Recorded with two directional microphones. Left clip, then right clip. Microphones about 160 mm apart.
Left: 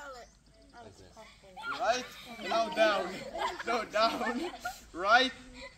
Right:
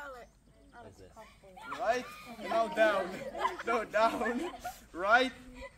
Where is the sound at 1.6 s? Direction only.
15° right (ahead or behind).